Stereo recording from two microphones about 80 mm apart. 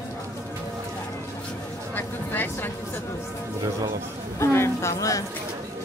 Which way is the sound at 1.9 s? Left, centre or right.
Left.